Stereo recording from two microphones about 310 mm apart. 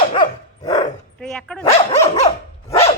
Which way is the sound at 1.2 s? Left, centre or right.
Centre.